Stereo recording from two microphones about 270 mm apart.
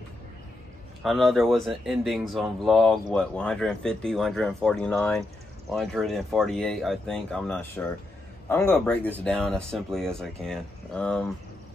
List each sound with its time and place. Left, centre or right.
1.0 s a man's voice: centre